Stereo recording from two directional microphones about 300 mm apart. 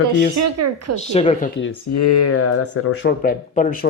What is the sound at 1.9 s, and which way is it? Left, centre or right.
Speech, left.